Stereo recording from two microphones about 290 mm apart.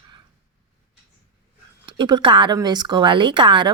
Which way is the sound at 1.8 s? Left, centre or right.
Centre.